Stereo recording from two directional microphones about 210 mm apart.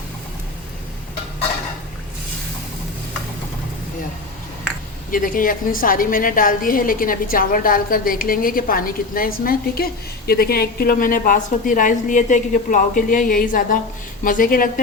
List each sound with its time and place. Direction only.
5.1 s a woman's voice: 40° left (ahead or behind)